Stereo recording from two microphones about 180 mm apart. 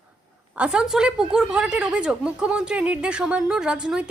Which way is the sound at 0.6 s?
5° right (ahead or behind).